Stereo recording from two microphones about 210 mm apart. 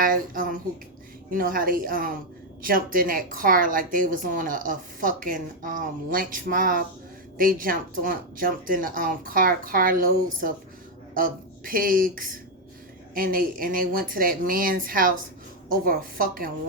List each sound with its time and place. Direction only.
0.0 s a woman's voice: 40° right (ahead or behind)